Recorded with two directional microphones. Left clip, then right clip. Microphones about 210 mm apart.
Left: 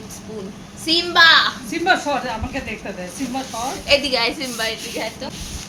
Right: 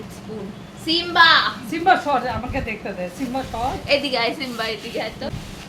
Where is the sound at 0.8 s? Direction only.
5° right (ahead or behind).